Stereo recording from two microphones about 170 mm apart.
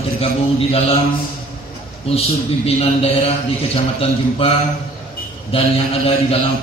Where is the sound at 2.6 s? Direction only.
35° left (ahead or behind).